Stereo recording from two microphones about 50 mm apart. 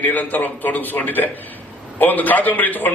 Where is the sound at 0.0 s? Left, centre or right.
Left.